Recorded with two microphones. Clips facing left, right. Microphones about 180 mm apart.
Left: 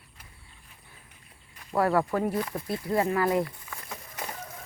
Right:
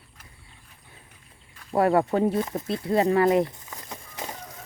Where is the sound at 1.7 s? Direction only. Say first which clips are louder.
Right 4 dB; 25° right (ahead or behind).